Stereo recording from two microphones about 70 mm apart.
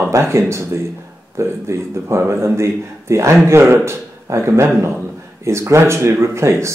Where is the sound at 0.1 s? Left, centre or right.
Right.